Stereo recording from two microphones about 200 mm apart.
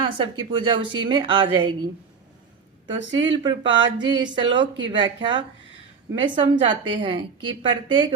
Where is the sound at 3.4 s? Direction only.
20° right (ahead or behind).